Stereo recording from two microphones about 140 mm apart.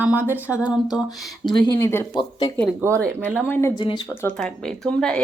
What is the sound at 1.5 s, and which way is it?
Speech, 30° left (ahead or behind).